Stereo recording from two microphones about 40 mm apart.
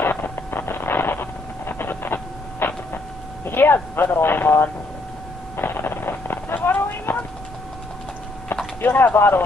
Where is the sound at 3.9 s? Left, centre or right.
Left.